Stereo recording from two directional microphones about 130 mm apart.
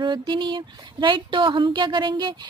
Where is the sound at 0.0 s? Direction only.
35° right (ahead or behind).